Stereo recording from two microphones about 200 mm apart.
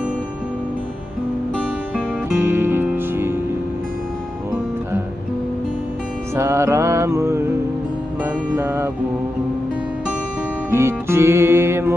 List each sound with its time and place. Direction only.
2.4 s music: 10° right (ahead or behind)
6.3 s music: 15° right (ahead or behind)
8.5 s music: 10° right (ahead or behind)
10.7 s music: 10° right (ahead or behind)